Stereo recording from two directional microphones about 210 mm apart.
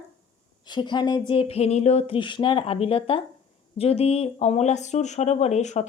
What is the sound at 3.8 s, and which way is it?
Speech, 30° left (ahead or behind).